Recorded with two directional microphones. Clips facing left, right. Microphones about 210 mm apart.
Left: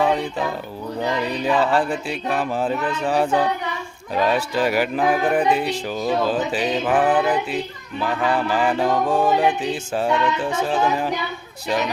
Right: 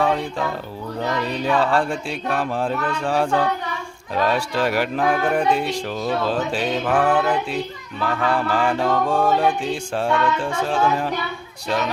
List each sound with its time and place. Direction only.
0.0 s speech: 5° left (ahead or behind)
0.9 s a sound: 15° left (ahead or behind)
1.5 s music: centre (ahead or behind)
10.1 s speech: 20° left (ahead or behind)
10.6 s music: 5° left (ahead or behind)